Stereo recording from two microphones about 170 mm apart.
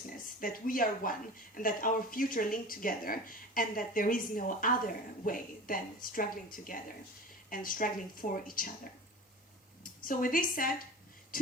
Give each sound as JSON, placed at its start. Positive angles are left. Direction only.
{"t": 0.2, "sound": "a woman's voice", "side_deg": 55}